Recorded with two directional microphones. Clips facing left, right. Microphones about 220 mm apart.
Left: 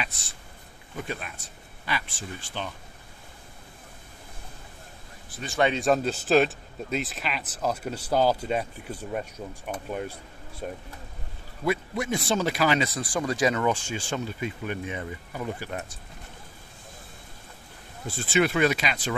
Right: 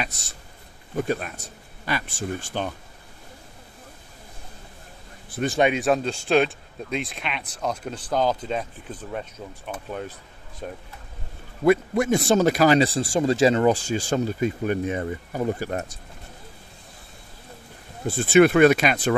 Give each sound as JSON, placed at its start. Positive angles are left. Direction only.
{"t": 0.9, "sound": "speech", "side_deg": -45}
{"t": 5.8, "sound": "speech", "side_deg": 0}
{"t": 11.6, "sound": "speech", "side_deg": -55}
{"t": 18.0, "sound": "speech", "side_deg": -55}